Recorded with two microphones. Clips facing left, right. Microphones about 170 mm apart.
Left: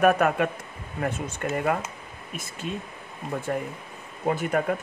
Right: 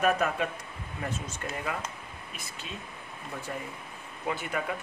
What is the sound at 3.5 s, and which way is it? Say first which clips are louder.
Speech: left 8 dB; 50° left (ahead or behind).